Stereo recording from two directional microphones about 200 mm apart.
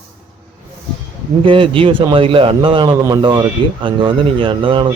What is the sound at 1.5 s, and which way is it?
Speech, 25° right (ahead or behind).